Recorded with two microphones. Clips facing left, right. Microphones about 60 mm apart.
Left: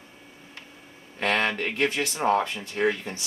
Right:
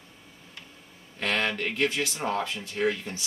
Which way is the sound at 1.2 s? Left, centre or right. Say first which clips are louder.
Left 3 dB; left.